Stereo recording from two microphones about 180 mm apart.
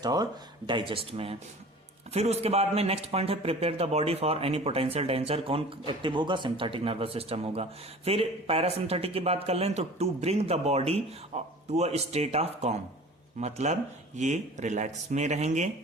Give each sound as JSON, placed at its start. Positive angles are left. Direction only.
{"t": 0.0, "sound": "a man's voice", "side_deg": -20}